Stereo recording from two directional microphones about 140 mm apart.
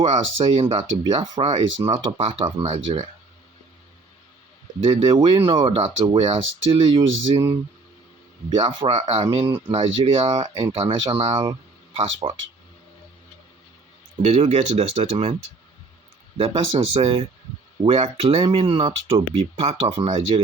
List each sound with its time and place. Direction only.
0.0 s speech: 35° right (ahead or behind)
4.8 s speech: 40° right (ahead or behind)
8.4 s speech: 35° right (ahead or behind)
14.3 s speech: 55° right (ahead or behind)
16.4 s speech: 40° right (ahead or behind)